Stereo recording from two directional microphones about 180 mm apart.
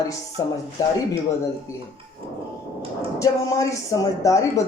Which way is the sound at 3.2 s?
20° left (ahead or behind).